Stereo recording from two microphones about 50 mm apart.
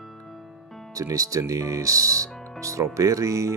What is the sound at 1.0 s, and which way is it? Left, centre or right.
Speech, right.